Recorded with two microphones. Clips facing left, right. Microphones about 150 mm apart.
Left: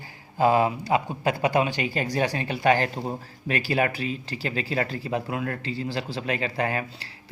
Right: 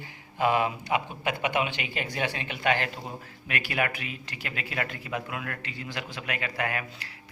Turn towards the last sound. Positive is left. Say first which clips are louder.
# left 4 dB
turn(degrees=30)  # may be behind; listen again after turning